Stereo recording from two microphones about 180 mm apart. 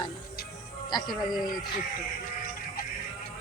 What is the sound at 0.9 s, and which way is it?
Speech, 20° left (ahead or behind).